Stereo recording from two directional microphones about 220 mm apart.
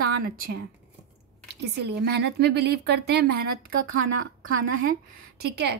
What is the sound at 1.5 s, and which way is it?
A woman's voice, 50° right (ahead or behind).